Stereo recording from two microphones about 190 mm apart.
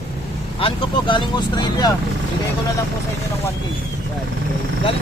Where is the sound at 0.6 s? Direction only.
25° left (ahead or behind).